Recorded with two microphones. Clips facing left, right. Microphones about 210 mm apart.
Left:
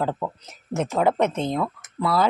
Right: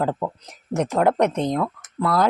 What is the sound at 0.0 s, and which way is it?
Speech, 5° right (ahead or behind).